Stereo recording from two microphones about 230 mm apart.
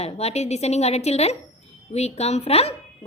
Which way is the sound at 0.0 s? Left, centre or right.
Left.